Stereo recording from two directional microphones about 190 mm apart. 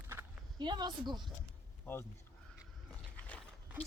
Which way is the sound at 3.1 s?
5° left (ahead or behind).